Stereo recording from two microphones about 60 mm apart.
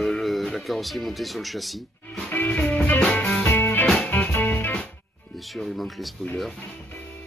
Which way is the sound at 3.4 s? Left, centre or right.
Left.